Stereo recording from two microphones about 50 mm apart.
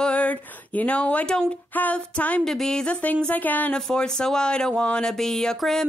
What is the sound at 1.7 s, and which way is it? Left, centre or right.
Music, left.